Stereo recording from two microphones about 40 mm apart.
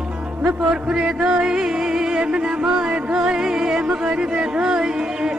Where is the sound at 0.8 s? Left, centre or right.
Right.